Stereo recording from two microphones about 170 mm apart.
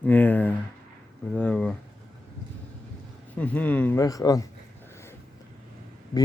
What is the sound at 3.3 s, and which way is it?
Speech, 10° left (ahead or behind).